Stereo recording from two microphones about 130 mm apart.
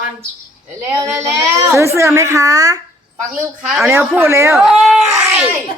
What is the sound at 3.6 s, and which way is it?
Speech, 5° right (ahead or behind).